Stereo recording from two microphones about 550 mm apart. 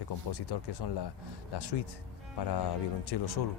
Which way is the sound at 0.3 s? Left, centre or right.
Left.